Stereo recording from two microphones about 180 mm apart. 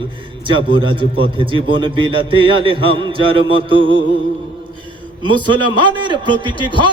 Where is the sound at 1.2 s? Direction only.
30° right (ahead or behind).